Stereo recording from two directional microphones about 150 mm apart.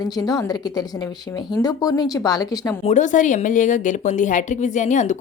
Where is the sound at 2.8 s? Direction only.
50° left (ahead or behind).